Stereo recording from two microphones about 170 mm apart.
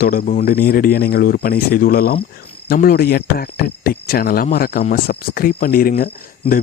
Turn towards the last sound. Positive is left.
turn(degrees=35)  # may be behind; listen again after turning